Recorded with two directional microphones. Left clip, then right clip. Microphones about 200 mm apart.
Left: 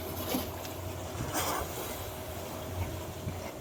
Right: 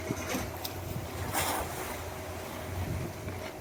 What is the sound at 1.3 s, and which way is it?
Vehicle, 55° left (ahead or behind).